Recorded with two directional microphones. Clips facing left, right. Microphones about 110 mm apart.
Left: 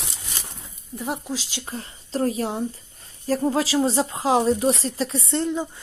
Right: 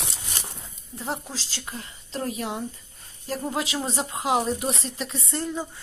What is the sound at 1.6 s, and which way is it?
A woman's voice, 35° left (ahead or behind).